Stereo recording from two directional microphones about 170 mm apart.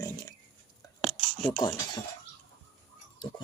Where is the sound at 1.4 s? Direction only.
10° left (ahead or behind).